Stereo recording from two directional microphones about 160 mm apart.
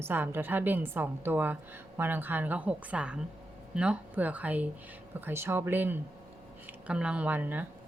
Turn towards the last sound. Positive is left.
turn(degrees=-10)  # may be behind; listen again after turning